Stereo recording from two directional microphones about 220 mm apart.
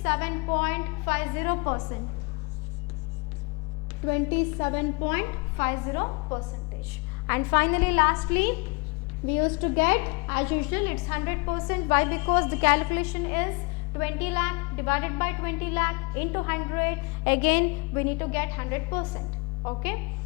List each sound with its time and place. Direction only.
0.0 s a woman's voice: 10° left (ahead or behind)
4.0 s a woman's voice: 10° left (ahead or behind)